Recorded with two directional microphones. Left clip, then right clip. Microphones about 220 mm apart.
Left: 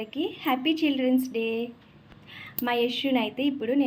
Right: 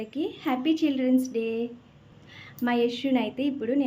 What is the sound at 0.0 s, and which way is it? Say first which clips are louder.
A woman's voice: left 1 dB; 10° right (ahead or behind).